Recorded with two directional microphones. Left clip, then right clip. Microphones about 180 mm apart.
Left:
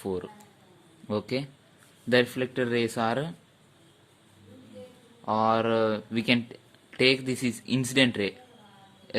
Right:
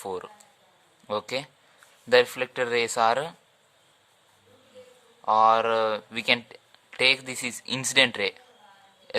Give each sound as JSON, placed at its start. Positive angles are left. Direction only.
{"t": 0.0, "sound": "speech", "side_deg": -30}
{"t": 5.2, "sound": "speech", "side_deg": -25}
{"t": 9.1, "sound": "a sound", "side_deg": -25}